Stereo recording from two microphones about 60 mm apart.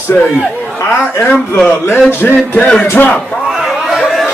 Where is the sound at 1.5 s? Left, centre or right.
Left.